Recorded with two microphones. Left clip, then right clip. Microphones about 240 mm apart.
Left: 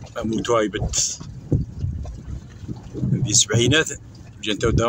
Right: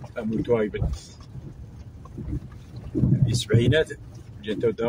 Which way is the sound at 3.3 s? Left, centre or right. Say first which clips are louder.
Left 8 dB; left.